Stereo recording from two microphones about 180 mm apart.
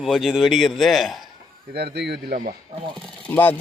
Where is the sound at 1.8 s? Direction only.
70° right (ahead or behind).